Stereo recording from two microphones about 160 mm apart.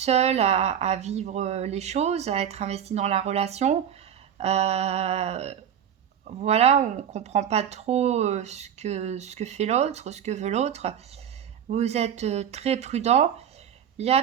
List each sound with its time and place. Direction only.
0.0 s speech: 45° right (ahead or behind)
4.4 s a sound: 40° right (ahead or behind)
6.2 s speech: 40° right (ahead or behind)